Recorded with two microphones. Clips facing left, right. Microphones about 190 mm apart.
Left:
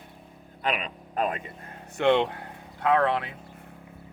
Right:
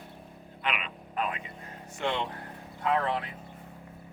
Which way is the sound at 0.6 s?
40° left (ahead or behind).